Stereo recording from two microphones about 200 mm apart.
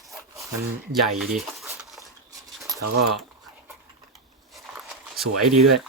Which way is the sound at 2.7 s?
20° right (ahead or behind).